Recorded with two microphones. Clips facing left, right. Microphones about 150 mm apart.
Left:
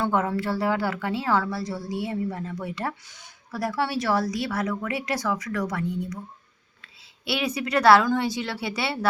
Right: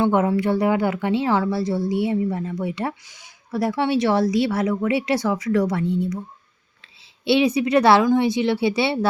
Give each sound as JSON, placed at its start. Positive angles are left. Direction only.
{"t": 0.0, "sound": "a woman's voice", "side_deg": -20}
{"t": 3.1, "sound": "speech", "side_deg": -10}
{"t": 3.5, "sound": "a woman's voice", "side_deg": -25}
{"t": 7.3, "sound": "a woman's voice", "side_deg": -25}